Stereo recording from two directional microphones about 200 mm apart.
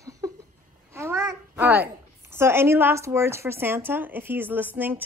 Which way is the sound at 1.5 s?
10° right (ahead or behind).